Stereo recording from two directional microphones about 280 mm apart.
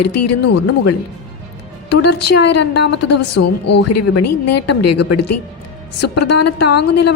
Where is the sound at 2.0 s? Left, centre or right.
Left.